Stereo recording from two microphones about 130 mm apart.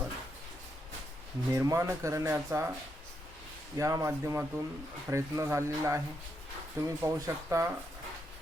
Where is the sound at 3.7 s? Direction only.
25° right (ahead or behind).